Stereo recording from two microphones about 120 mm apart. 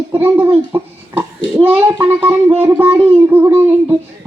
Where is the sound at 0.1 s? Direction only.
15° right (ahead or behind).